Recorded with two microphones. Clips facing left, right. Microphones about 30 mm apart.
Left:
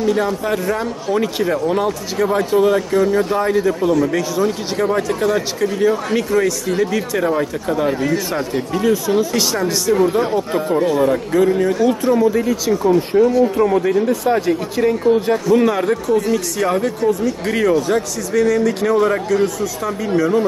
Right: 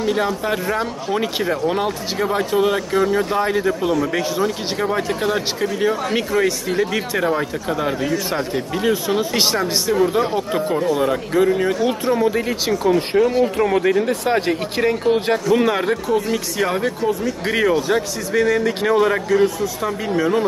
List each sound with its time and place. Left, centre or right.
0.0 s a man's voice: right
8.8 s a man's voice: right
11.0 s a man's voice: centre
12.4 s a man's voice: right
13.3 s speech: right
13.8 s a man's voice: right
15.5 s a man's voice: centre